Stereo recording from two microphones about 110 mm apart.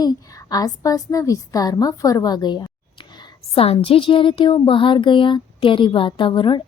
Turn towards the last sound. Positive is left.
turn(degrees=50)  # may be behind; listen again after turning